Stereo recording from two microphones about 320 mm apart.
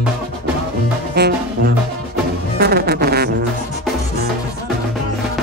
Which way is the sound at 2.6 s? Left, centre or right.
Right.